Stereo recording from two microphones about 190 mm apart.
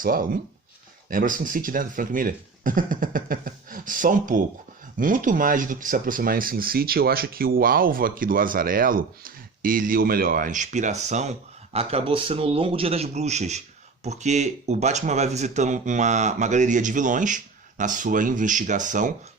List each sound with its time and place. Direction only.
0.0 s speech: 45° right (ahead or behind)